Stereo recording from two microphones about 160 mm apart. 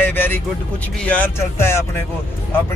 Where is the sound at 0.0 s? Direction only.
15° left (ahead or behind).